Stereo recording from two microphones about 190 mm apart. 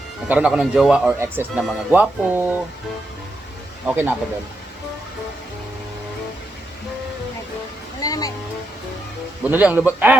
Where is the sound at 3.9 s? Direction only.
10° right (ahead or behind).